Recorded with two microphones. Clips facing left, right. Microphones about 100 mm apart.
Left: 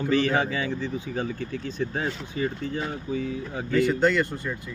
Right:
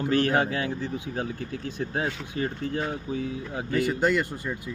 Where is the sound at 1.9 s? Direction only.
55° right (ahead or behind).